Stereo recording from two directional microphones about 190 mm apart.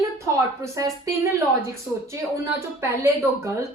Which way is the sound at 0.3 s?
15° right (ahead or behind).